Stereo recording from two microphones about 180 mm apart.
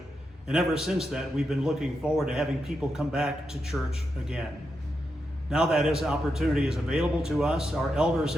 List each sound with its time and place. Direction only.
0.4 s a man's voice: centre (ahead or behind)
5.5 s a man's voice: centre (ahead or behind)